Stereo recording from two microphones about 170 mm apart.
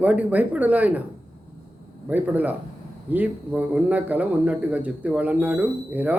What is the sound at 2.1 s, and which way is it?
A man's voice, 10° right (ahead or behind).